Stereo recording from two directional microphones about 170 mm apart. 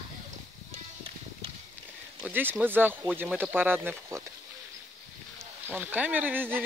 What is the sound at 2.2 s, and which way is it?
Speech, 10° right (ahead or behind).